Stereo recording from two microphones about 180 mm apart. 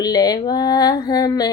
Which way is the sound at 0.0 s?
20° left (ahead or behind).